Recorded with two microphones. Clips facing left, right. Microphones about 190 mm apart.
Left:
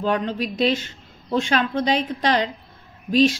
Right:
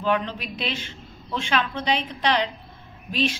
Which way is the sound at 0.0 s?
45° left (ahead or behind).